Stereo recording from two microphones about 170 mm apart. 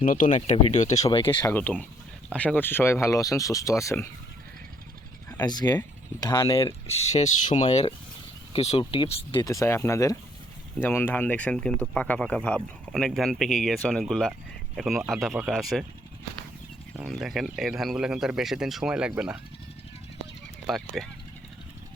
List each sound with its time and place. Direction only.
0.0 s speech: 50° left (ahead or behind)
1.1 s speech: 30° left (ahead or behind)
1.5 s speech: 10° left (ahead or behind)
5.4 s speech: 25° left (ahead or behind)
9.4 s speech: 20° left (ahead or behind); by 15.9 s centre (ahead or behind)
17.1 s speech: centre (ahead or behind)
20.7 s speech: centre (ahead or behind)